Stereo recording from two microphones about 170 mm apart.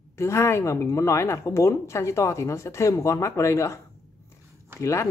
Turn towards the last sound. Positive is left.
turn(degrees=15)  # may be behind; listen again after turning